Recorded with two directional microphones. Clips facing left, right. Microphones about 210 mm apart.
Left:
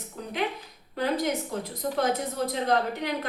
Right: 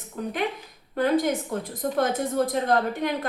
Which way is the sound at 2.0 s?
50° right (ahead or behind).